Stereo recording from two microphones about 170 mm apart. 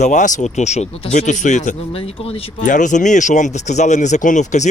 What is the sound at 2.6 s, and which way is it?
Speech, 45° left (ahead or behind).